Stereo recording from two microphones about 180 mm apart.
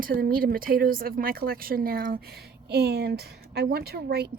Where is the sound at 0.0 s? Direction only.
55° right (ahead or behind).